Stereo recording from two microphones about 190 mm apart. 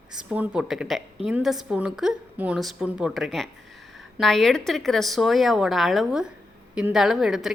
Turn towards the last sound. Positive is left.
turn(degrees=0)  # may be behind; listen again after turning